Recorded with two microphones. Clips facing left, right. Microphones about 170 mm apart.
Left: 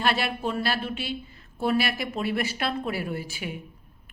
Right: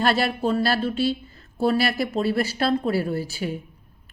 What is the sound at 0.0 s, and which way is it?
A woman's voice, 40° right (ahead or behind).